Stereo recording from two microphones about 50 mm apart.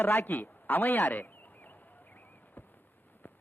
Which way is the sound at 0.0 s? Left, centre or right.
Left.